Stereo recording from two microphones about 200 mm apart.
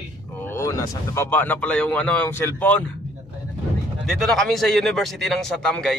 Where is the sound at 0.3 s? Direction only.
10° left (ahead or behind).